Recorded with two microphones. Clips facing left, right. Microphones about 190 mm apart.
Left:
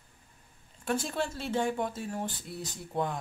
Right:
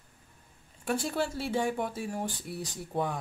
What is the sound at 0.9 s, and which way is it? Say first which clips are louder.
Speech: right 1 dB; 10° right (ahead or behind).